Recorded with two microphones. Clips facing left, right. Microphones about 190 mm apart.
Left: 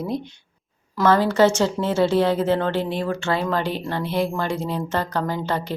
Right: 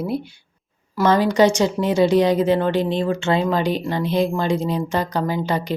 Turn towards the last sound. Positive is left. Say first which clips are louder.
# right 3 dB
turn(degrees=-15)  # may be behind; listen again after turning